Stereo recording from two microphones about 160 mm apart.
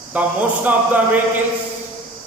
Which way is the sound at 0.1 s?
10° right (ahead or behind).